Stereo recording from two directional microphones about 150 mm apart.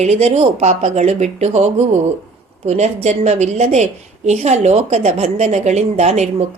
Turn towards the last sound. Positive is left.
turn(degrees=-50)  # may be behind; listen again after turning